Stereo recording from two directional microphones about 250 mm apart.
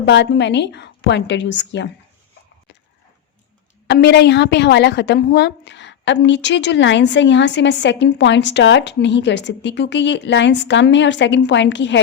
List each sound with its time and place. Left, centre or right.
0.0 s a woman's voice: left
3.8 s a woman's voice: left